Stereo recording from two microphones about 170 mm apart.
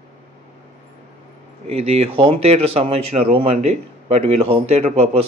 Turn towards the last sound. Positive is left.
turn(degrees=-40)  # may be behind; listen again after turning